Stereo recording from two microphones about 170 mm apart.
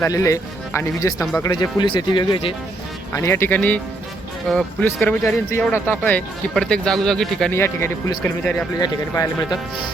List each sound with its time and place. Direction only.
0.0 s speech: 20° left (ahead or behind)
3.1 s speech: 15° left (ahead or behind)
7.5 s speech: 15° left (ahead or behind)